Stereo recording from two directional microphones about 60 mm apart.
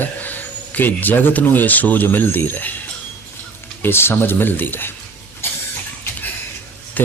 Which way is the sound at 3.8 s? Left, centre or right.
Left.